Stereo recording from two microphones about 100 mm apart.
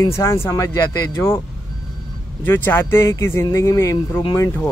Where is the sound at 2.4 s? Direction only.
25° left (ahead or behind).